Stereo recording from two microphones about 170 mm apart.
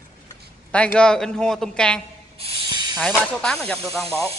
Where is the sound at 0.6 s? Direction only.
5° left (ahead or behind).